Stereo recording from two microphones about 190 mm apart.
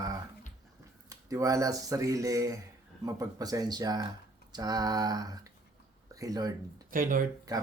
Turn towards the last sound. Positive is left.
turn(degrees=-20)  # may be behind; listen again after turning